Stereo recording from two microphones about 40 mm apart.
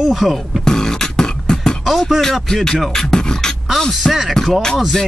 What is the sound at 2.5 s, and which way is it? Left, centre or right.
Speech, centre.